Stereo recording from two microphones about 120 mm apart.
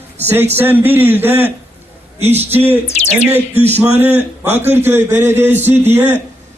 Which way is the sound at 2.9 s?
65° left (ahead or behind).